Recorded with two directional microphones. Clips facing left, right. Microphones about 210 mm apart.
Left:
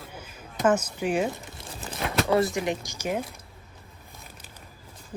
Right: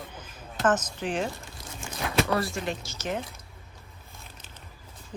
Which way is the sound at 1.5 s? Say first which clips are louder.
Left 2 dB; 30° left (ahead or behind).